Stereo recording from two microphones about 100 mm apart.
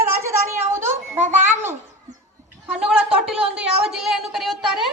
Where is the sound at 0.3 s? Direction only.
25° right (ahead or behind).